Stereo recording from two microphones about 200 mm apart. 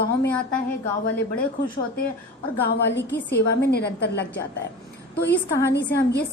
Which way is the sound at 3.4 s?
55° left (ahead or behind).